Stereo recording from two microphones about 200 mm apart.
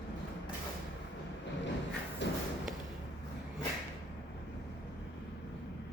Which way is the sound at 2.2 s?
60° left (ahead or behind).